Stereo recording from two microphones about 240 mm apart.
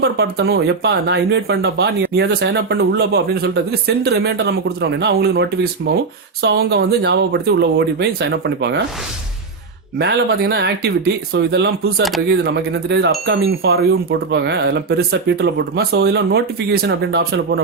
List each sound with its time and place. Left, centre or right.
0.0 s speech: right
10.0 s speech: right